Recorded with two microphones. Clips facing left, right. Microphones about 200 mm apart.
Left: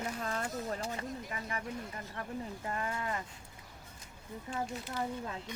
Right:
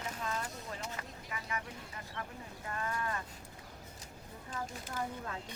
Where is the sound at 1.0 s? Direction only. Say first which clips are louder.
Left 5 dB; 30° left (ahead or behind).